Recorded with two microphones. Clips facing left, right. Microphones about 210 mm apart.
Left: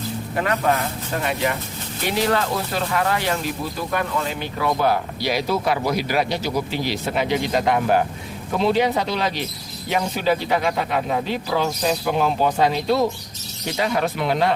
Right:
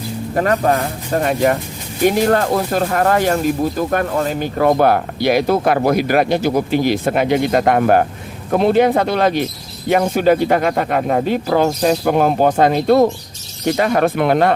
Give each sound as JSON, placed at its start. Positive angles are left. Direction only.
{"t": 0.3, "sound": "speech", "side_deg": -40}